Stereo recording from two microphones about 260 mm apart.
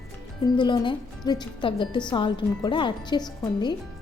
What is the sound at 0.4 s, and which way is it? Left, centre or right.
A woman's voice, centre.